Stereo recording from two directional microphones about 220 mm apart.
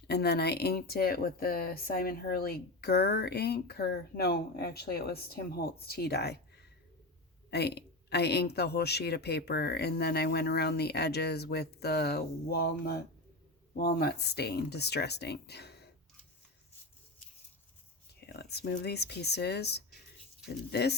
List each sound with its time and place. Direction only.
0.1 s speech: 45° left (ahead or behind)
18.3 s speech: 50° left (ahead or behind)